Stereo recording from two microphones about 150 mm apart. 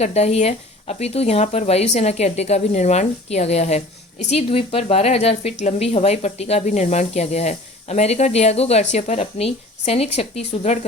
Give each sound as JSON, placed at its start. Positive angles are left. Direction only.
{"t": 0.0, "sound": "speech", "side_deg": 45}